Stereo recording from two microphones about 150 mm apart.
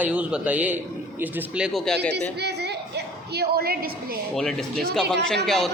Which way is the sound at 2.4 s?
90° right.